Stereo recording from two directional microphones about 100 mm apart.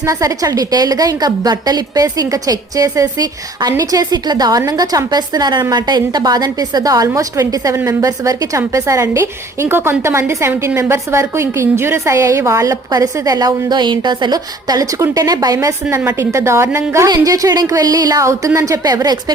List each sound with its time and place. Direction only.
0.0 s a woman's voice: 35° right (ahead or behind)
12.9 s a woman's voice: 40° right (ahead or behind)
16.0 s a woman's voice: 20° right (ahead or behind)
17.1 s a woman's voice: 35° right (ahead or behind)